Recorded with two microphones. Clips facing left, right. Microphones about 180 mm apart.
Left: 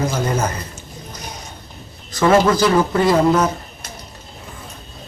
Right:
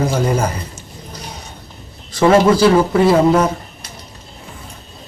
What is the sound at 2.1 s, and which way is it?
Speech, 30° right (ahead or behind).